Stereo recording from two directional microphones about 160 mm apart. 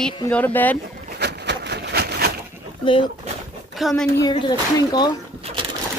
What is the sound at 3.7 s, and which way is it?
Speech, centre (ahead or behind).